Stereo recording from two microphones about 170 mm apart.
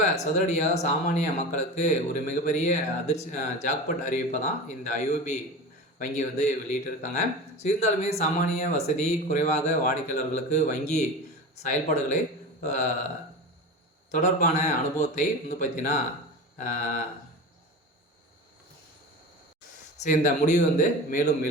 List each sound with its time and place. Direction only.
0.0 s speech: 45° left (ahead or behind)
14.1 s speech: 45° left (ahead or behind)
20.0 s speech: 45° left (ahead or behind)